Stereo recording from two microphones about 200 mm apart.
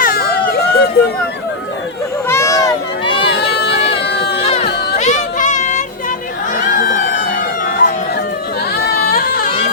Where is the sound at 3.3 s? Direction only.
55° left (ahead or behind).